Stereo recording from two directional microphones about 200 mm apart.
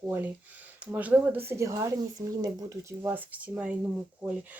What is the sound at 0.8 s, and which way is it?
Speech, 5° right (ahead or behind).